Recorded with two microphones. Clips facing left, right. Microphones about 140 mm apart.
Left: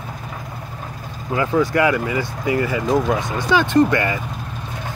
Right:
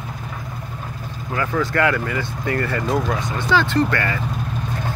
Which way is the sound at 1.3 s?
20° left (ahead or behind).